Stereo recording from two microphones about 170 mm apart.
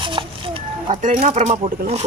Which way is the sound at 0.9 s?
50° right (ahead or behind).